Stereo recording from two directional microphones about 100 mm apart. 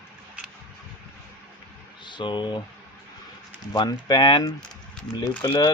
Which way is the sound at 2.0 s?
50° left (ahead or behind).